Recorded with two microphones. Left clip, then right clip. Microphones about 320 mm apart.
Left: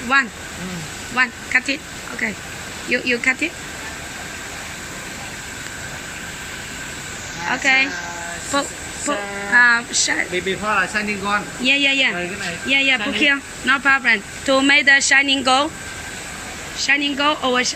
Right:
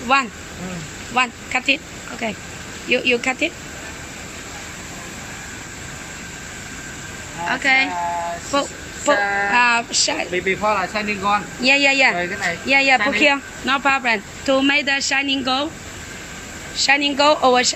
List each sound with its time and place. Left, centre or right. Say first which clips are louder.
0.1 s speech: left 1 dB; centre
7.4 s speech: even; centre
10.3 s speech: right 1 dB; centre
16.7 s speech: right 2 dB; centre